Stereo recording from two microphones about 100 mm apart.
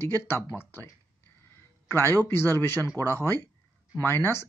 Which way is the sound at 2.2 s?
25° left (ahead or behind).